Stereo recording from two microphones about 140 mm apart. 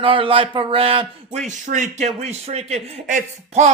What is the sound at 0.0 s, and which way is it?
Speech, 40° right (ahead or behind).